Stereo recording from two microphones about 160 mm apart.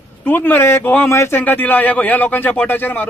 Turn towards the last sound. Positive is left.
turn(degrees=10)  # may be behind; listen again after turning